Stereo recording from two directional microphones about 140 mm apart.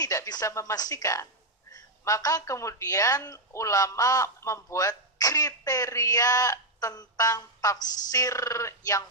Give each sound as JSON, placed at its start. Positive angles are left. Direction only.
{"t": 0.0, "sound": "a woman's voice", "side_deg": 25}